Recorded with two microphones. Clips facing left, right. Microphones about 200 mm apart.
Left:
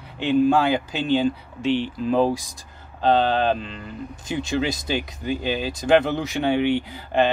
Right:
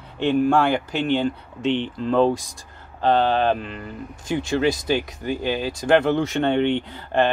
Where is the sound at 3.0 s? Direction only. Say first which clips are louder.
Even; 20° left (ahead or behind).